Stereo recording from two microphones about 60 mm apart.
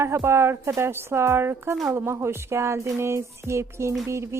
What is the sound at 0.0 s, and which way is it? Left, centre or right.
A woman's voice, right.